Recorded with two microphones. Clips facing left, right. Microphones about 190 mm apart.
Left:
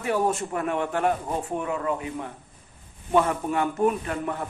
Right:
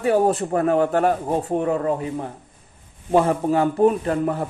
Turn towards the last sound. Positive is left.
turn(degrees=-40)  # may be behind; listen again after turning